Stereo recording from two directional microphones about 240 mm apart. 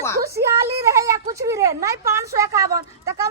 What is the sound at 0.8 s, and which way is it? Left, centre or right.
Speech, centre.